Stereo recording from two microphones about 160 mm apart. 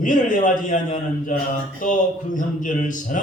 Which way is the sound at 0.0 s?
55° left (ahead or behind).